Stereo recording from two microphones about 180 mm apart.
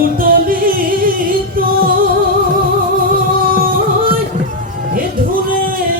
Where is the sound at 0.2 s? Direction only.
50° right (ahead or behind).